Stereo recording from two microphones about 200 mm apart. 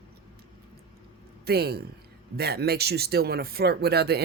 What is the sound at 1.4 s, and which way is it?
Speech, 55° right (ahead or behind).